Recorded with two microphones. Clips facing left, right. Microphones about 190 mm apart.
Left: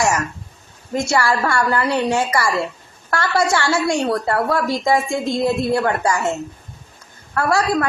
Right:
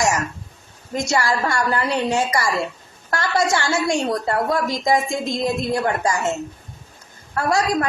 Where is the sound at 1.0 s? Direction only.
20° right (ahead or behind).